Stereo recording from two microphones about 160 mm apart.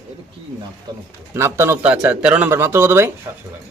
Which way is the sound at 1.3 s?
15° right (ahead or behind).